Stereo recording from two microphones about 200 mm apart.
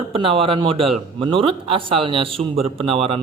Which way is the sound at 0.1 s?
30° right (ahead or behind).